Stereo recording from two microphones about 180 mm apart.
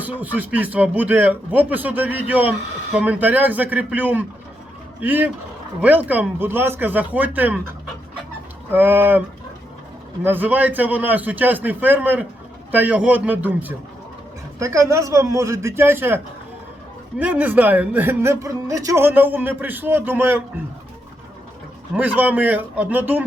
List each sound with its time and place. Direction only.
0.0 s speech: 10° right (ahead or behind)
8.7 s speech: 10° right (ahead or behind)
10.2 s speech: 10° right (ahead or behind)
21.9 s speech: 10° right (ahead or behind)